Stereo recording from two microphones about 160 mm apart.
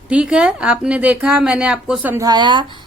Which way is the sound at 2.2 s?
25° right (ahead or behind).